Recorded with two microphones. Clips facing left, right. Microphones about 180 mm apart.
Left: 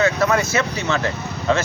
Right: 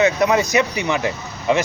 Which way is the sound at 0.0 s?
15° right (ahead or behind).